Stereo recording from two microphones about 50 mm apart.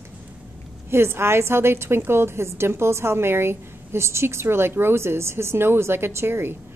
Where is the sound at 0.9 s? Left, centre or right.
Right.